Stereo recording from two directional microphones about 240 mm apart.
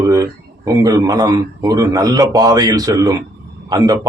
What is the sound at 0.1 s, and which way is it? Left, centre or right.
A man's voice, centre.